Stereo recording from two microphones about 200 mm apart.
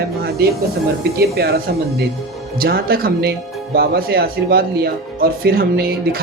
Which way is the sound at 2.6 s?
50° right (ahead or behind).